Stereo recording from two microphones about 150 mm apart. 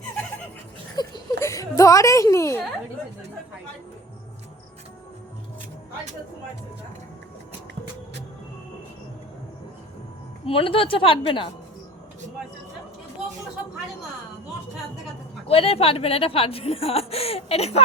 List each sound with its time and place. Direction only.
0.9 s a sound: 25° left (ahead or behind)
10.4 s speech: 35° left (ahead or behind)
15.4 s speech: 40° left (ahead or behind)